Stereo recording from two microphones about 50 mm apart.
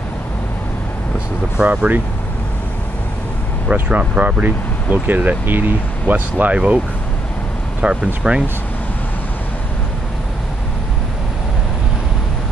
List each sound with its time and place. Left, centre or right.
1.6 s speech: right
4.2 s speech: right
7.8 s speech: centre